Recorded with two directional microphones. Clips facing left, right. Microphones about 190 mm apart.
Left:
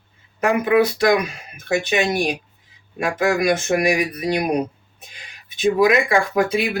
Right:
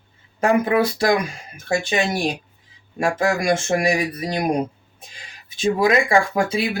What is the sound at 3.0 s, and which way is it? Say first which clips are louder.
Speech: left 1 dB; 30° right (ahead or behind).